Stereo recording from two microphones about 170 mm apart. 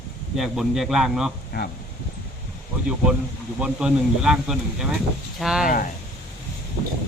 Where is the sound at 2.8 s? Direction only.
5° right (ahead or behind).